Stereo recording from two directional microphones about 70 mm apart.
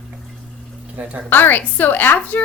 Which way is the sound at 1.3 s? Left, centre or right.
Left.